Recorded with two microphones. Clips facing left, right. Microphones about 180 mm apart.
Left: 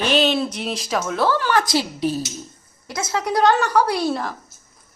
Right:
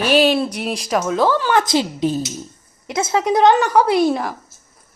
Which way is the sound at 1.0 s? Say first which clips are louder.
Right 3 dB; 15° right (ahead or behind).